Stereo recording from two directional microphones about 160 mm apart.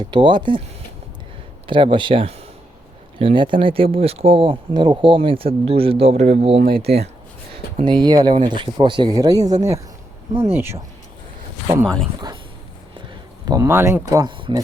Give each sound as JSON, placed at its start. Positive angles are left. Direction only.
{"t": 0.0, "sound": "speech", "side_deg": -30}
{"t": 1.6, "sound": "speech", "side_deg": -30}
{"t": 6.6, "sound": "speech", "side_deg": -70}
{"t": 7.9, "sound": "speech", "side_deg": -25}
{"t": 13.5, "sound": "speech", "side_deg": -20}